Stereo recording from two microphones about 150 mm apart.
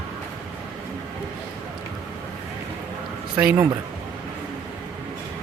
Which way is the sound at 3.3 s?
10° right (ahead or behind).